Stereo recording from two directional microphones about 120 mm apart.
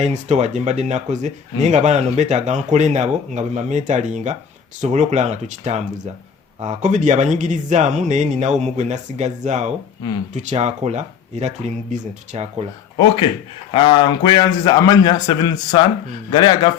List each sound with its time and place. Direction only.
0.0 s speech: 70° right (ahead or behind); by 4.4 s 90° right
4.8 s speech: 80° right
13.7 s a man's voice: 45° left (ahead or behind)